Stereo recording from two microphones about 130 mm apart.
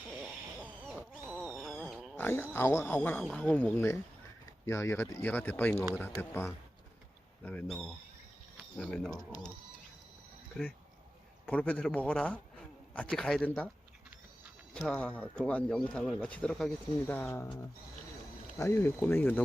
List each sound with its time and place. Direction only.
0.1 s owl: 15° right (ahead or behind)
0.9 s cat: 10° right (ahead or behind)
2.1 s speech: 15° left (ahead or behind)
11.4 s speech: 10° left (ahead or behind)
14.7 s speech: 5° left (ahead or behind)
18.5 s speech: 20° left (ahead or behind)